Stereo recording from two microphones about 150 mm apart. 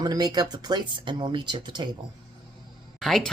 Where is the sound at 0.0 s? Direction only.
25° right (ahead or behind).